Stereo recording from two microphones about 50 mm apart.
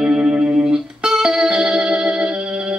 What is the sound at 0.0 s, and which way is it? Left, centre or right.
Music, centre.